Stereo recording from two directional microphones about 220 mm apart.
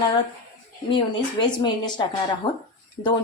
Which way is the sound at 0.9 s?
20° left (ahead or behind).